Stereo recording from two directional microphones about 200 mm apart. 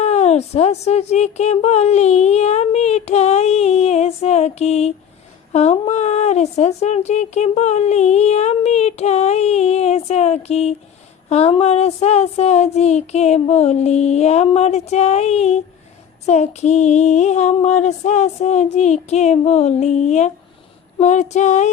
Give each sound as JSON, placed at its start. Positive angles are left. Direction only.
{"t": 0.0, "sound": "speech", "side_deg": 35}